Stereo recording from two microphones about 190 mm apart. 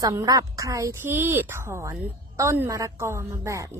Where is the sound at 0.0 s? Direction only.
20° right (ahead or behind).